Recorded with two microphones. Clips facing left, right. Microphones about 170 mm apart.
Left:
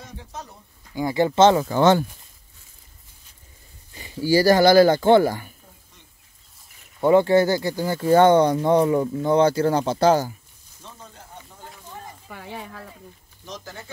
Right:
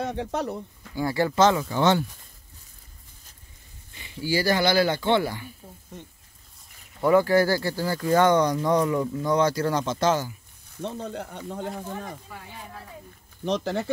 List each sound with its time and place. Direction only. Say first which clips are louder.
0.0 s speech: right 11 dB; 70° right (ahead or behind)
0.9 s speech: left 4 dB; 20° left (ahead or behind)
1.6 s speech: left 5 dB; 45° left (ahead or behind)
3.9 s speech: left 7 dB; 40° left (ahead or behind)
7.0 s speech: left 3 dB; 25° left (ahead or behind)
10.8 s speech: right 13 dB; 70° right (ahead or behind)
12.3 s speech: left 5 dB; 70° left (ahead or behind)
13.5 s speech: right 12 dB; 70° right (ahead or behind)